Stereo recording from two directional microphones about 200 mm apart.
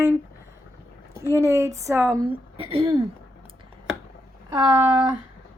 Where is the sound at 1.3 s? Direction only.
15° right (ahead or behind).